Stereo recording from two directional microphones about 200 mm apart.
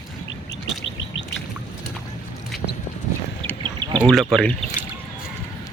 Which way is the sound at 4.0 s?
Centre (ahead or behind).